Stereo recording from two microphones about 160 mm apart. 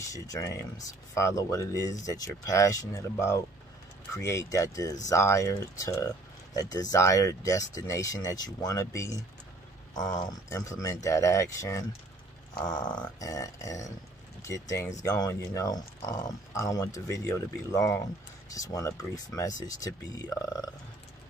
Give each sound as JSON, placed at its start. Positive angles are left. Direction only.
{"t": 0.0, "sound": "speech", "side_deg": 20}